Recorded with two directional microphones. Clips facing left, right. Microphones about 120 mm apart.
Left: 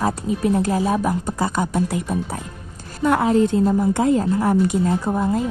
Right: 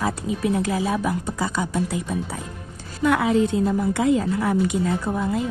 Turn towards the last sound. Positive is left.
turn(degrees=35)  # may be behind; listen again after turning